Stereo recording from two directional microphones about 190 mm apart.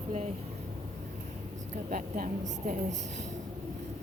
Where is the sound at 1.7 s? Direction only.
40° right (ahead or behind).